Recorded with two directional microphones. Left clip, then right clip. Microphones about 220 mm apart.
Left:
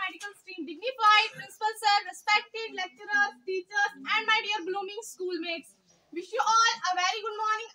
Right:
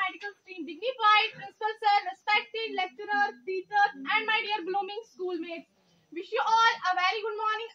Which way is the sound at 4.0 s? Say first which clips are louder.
Left 1 dB; 30° left (ahead or behind).